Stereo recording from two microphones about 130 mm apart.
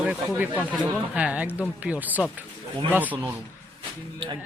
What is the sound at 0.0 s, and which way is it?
Speech, 10° right (ahead or behind).